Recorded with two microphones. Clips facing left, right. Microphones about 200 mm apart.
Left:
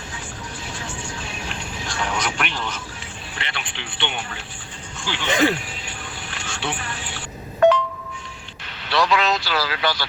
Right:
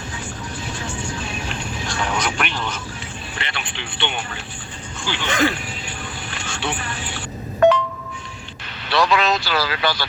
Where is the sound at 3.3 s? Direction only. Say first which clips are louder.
Right 1 dB; 55° right (ahead or behind).